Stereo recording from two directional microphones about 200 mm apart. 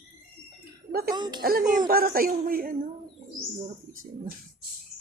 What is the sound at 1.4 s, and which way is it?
Speech, 45° right (ahead or behind).